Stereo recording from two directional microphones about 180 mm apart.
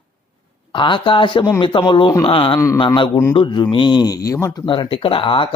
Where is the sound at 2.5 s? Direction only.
15° left (ahead or behind).